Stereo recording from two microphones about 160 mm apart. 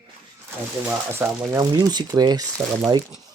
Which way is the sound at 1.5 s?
25° right (ahead or behind).